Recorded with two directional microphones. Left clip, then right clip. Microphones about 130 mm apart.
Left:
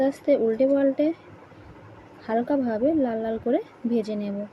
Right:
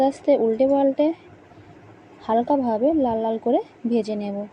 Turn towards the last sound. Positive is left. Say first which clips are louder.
# right 3 dB
turn(degrees=-15)  # may be behind; listen again after turning